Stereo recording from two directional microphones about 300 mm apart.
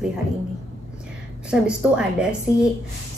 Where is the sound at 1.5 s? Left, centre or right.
Centre.